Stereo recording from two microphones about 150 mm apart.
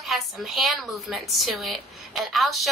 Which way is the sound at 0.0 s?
Centre (ahead or behind).